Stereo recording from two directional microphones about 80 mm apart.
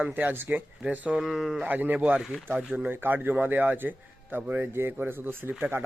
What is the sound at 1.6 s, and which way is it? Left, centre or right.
A man's voice, right.